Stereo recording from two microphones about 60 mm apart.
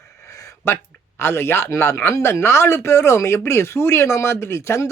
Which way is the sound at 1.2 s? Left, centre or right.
Left.